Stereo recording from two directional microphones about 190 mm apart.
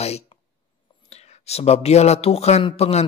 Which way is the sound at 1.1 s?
35° left (ahead or behind).